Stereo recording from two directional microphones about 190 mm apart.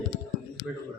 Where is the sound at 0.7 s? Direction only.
5° right (ahead or behind).